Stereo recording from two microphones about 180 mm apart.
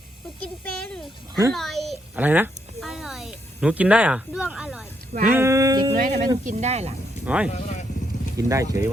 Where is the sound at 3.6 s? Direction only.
5° right (ahead or behind).